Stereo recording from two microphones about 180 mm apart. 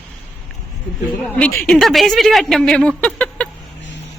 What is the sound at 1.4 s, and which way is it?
A woman's voice, 5° left (ahead or behind).